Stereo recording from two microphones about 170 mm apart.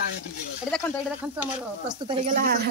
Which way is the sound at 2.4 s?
60° right (ahead or behind).